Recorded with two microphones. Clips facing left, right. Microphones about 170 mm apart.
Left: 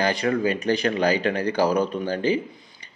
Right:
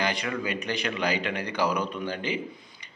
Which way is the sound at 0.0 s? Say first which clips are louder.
Left 7 dB; 35° left (ahead or behind).